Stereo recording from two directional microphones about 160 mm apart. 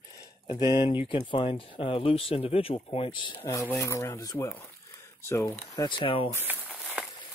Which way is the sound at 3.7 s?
20° left (ahead or behind).